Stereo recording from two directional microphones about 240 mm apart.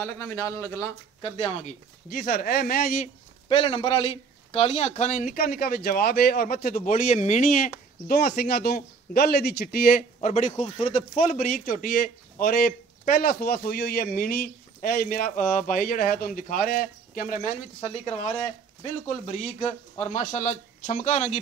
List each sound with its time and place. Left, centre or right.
0.0 s speech: centre; by 3.1 s left
3.4 s a man's voice: left